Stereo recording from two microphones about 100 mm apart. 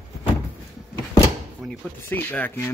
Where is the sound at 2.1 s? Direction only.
20° left (ahead or behind).